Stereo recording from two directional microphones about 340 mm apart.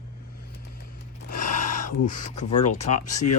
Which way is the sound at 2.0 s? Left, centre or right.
Left.